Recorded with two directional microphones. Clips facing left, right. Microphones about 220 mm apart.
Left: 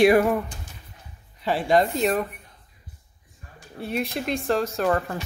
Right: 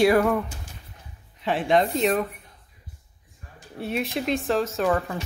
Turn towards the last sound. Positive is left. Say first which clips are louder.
# even
turn(degrees=0)  # may be behind; listen again after turning